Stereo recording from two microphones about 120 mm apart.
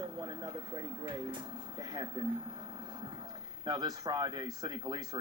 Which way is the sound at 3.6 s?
35° right (ahead or behind).